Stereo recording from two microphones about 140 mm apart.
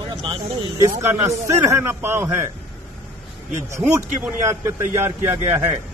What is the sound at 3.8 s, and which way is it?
A man's voice, 20° right (ahead or behind).